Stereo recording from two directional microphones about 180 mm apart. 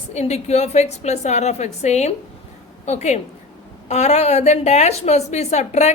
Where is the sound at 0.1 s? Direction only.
40° left (ahead or behind).